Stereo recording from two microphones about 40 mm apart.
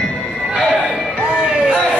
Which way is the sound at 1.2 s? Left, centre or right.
Centre.